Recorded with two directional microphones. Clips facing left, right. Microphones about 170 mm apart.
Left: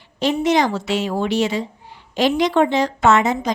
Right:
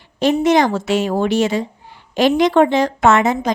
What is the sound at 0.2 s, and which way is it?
A woman's voice, 50° right (ahead or behind).